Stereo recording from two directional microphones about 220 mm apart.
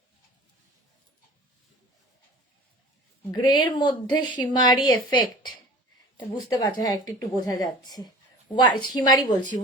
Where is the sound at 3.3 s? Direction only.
20° left (ahead or behind).